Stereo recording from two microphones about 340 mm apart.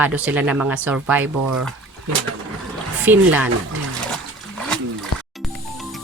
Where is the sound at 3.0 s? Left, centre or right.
Centre.